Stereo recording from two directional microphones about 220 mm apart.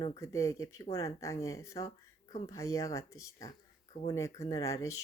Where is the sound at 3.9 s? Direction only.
25° left (ahead or behind).